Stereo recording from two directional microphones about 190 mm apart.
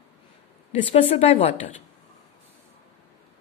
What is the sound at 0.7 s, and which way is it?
Speech, 30° left (ahead or behind).